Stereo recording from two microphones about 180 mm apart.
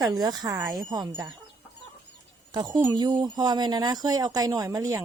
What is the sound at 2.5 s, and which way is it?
Speech, 25° right (ahead or behind).